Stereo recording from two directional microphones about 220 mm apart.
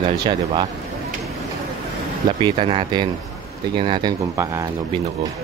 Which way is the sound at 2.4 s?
25° right (ahead or behind).